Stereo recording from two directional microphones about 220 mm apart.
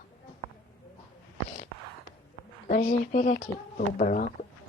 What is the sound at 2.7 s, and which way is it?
Speech, 35° left (ahead or behind).